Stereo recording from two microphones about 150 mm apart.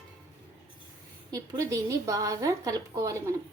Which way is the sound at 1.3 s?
20° right (ahead or behind).